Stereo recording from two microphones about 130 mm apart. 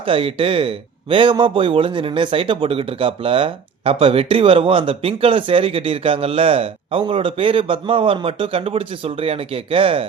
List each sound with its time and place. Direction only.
0.0 s speech: 45° right (ahead or behind)